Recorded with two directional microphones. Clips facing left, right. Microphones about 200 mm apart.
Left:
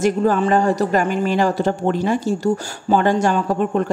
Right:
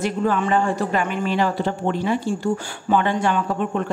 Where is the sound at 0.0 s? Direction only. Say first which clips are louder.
Left 5 dB; 40° left (ahead or behind).